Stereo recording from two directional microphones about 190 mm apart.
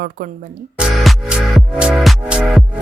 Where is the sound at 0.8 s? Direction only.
Centre (ahead or behind).